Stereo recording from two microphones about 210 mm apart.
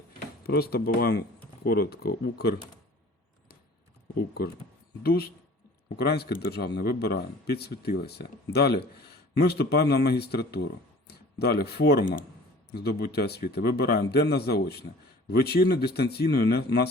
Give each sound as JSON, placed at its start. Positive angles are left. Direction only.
{"t": 0.4, "sound": "speech", "side_deg": 45}
{"t": 5.0, "sound": "speech", "side_deg": 45}